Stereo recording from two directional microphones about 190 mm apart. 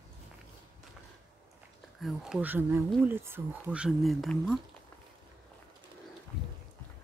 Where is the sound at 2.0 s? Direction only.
Centre (ahead or behind).